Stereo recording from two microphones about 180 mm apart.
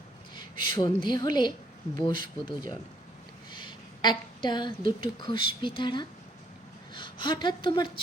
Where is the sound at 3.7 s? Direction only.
25° left (ahead or behind).